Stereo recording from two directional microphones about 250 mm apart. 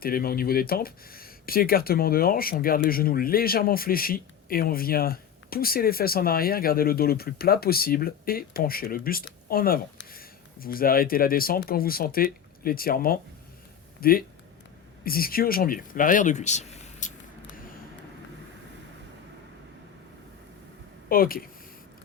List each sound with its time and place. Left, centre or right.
0.0 s speech: left
21.1 s speech: left